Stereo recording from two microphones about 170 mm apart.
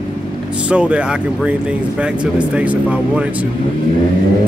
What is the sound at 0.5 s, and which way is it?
Speech, 5° right (ahead or behind).